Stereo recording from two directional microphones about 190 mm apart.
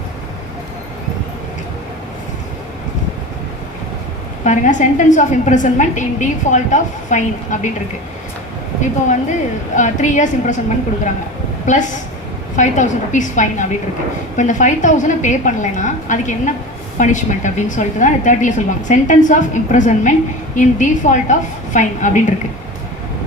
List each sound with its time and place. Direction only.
4.4 s a woman's voice: 40° left (ahead or behind)
9.7 s a woman's voice: 40° left (ahead or behind)
11.6 s a woman's voice: 40° left (ahead or behind)